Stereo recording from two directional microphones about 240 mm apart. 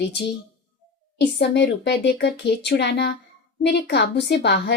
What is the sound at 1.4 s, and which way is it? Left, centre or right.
Speech, left.